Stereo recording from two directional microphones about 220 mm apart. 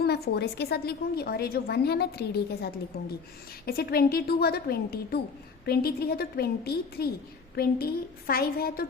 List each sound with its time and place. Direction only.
0.0 s a woman's voice: 45° left (ahead or behind)